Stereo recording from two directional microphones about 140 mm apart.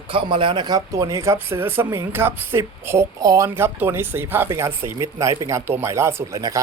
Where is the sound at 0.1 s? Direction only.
35° right (ahead or behind).